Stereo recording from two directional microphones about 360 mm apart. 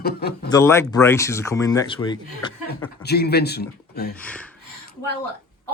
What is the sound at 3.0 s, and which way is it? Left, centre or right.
Speech, left.